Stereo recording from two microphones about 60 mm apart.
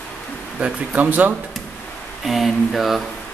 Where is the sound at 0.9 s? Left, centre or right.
Right.